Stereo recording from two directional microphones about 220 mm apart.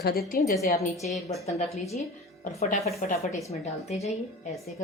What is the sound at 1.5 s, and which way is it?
Speech, 30° left (ahead or behind).